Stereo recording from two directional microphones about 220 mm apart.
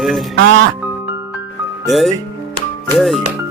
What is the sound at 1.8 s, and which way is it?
Speech, centre (ahead or behind).